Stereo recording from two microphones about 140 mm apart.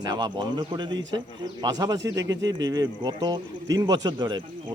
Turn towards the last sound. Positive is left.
turn(degrees=-30)  # may be behind; listen again after turning